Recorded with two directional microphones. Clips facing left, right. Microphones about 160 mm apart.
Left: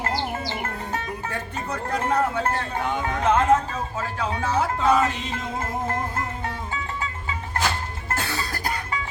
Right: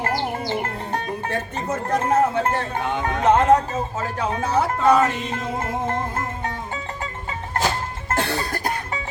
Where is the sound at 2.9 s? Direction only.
20° right (ahead or behind).